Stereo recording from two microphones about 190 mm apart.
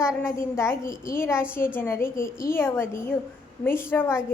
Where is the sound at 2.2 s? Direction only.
45° left (ahead or behind).